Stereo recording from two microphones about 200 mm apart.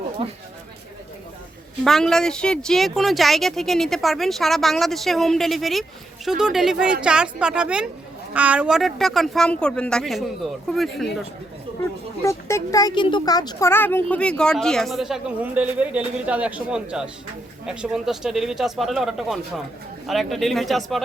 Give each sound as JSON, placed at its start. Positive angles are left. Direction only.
{"t": 0.2, "sound": "speech", "side_deg": -30}
{"t": 1.8, "sound": "speech", "side_deg": 0}
{"t": 12.2, "sound": "speech", "side_deg": 15}